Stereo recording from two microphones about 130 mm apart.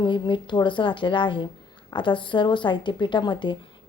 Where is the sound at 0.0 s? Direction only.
35° left (ahead or behind).